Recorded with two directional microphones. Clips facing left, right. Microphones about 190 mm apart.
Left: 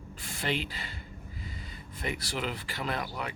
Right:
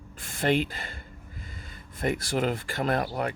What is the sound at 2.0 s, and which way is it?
Speech, 50° right (ahead or behind).